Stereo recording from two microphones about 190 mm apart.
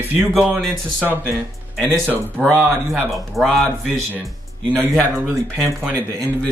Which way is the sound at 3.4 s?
Centre (ahead or behind).